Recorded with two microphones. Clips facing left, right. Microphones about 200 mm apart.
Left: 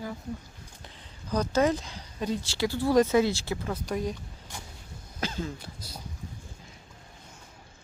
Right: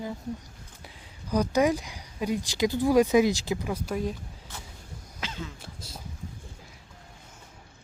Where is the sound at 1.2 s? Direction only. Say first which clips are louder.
Right 1 dB; 10° right (ahead or behind).